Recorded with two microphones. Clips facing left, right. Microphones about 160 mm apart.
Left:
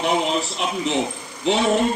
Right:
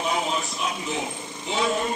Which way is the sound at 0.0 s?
75° left (ahead or behind).